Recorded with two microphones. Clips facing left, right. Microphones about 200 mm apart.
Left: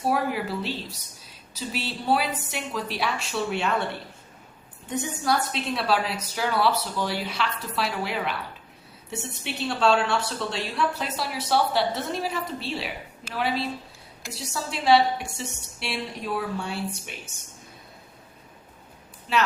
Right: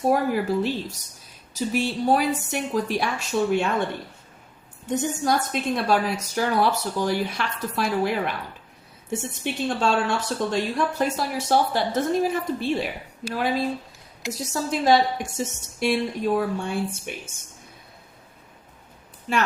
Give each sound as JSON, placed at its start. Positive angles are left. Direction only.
{"t": 0.1, "sound": "speech", "side_deg": -45}
{"t": 5.2, "sound": "speech", "side_deg": -45}